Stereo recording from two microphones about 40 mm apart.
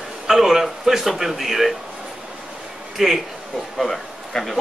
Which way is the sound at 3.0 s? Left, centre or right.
Centre.